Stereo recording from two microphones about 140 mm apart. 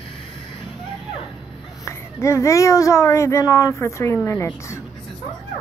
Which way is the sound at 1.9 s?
20° left (ahead or behind).